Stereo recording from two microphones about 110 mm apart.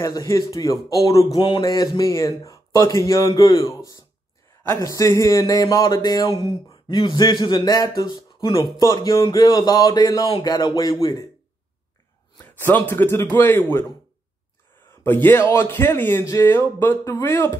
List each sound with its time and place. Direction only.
0.0 s speech: 30° left (ahead or behind)
6.9 s speech: 45° left (ahead or behind)
8.7 s speech: 35° left (ahead or behind)
12.4 s speech: 20° left (ahead or behind)
15.0 s speech: 20° left (ahead or behind)